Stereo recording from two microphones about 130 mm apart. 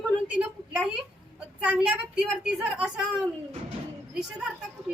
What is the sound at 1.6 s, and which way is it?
A woman's voice, 10° right (ahead or behind).